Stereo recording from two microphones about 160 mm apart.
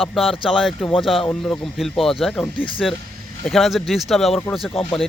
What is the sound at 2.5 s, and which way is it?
Speech, 30° left (ahead or behind).